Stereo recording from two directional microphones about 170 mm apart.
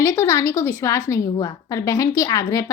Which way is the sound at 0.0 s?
15° left (ahead or behind).